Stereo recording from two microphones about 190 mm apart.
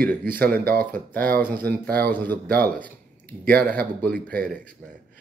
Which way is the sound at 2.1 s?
10° left (ahead or behind).